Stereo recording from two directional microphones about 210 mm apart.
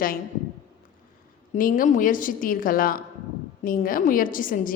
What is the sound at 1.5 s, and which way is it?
A woman's voice, 40° left (ahead or behind).